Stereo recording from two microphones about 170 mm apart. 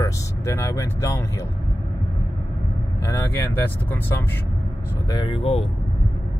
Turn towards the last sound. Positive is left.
turn(degrees=35)  # may be behind; listen again after turning